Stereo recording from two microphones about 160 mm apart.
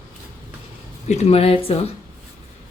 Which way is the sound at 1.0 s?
45° left (ahead or behind).